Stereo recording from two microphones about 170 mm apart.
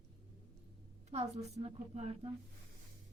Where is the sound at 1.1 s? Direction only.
40° right (ahead or behind).